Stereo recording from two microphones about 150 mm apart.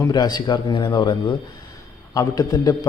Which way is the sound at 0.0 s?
25° left (ahead or behind).